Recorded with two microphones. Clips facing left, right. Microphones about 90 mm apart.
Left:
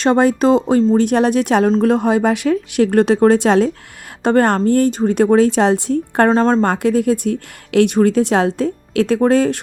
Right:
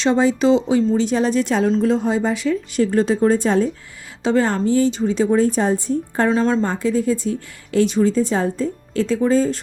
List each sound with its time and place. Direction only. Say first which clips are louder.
0.0 s speech: left 3 dB; 55° left (ahead or behind); by 3.7 s 80° left
4.2 s speech: left 4 dB; 55° left (ahead or behind)
6.3 s a woman's voice: left 2 dB; 40° left (ahead or behind)
6.6 s speech: left 4 dB; 65° left (ahead or behind)